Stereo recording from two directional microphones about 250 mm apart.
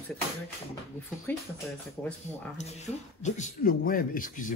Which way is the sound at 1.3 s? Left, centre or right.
Centre.